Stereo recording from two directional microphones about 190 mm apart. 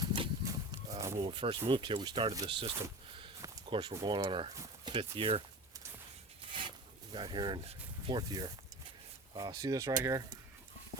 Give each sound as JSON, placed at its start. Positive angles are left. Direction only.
{"t": 0.0, "sound": "livestock", "side_deg": -20}
{"t": 1.2, "sound": "speech", "side_deg": -25}
{"t": 6.5, "sound": "a sound", "side_deg": -25}
{"t": 9.3, "sound": "speech", "side_deg": -20}